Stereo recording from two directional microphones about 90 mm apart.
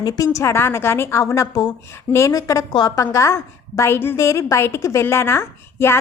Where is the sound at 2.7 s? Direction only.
50° left (ahead or behind).